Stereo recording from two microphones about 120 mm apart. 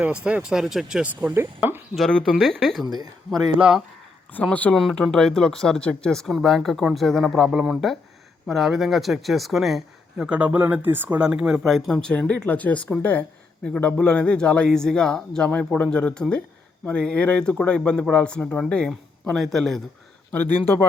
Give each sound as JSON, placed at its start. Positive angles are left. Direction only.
{"t": 0.3, "sound": "speech", "side_deg": -10}
{"t": 2.0, "sound": "speech", "side_deg": 5}
{"t": 2.8, "sound": "speech", "side_deg": -35}
{"t": 3.6, "sound": "speech", "side_deg": -5}
{"t": 4.3, "sound": "a man's voice", "side_deg": 15}